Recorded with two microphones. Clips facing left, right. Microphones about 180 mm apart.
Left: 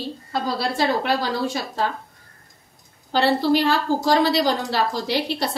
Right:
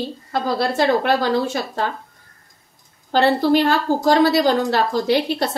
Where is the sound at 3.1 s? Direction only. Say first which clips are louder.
Right 3 dB; 50° right (ahead or behind).